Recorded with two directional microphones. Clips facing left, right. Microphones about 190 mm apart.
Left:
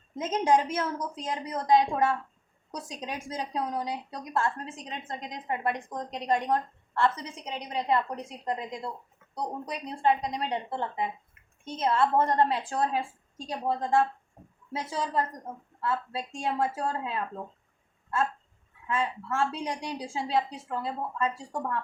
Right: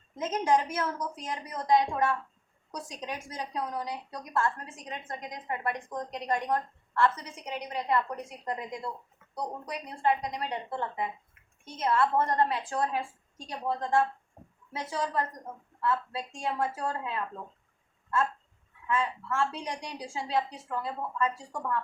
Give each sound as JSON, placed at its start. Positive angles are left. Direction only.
{"t": 0.2, "sound": "a woman's voice", "side_deg": 25}
{"t": 14.7, "sound": "a woman's voice", "side_deg": 25}
{"t": 18.9, "sound": "a woman's voice", "side_deg": 30}